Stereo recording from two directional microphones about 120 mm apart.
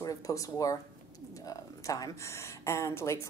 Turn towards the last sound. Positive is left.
turn(degrees=25)  # may be behind; listen again after turning